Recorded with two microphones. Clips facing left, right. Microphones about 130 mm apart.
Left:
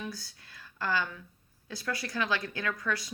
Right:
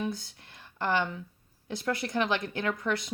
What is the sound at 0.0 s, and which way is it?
Speech, 25° right (ahead or behind).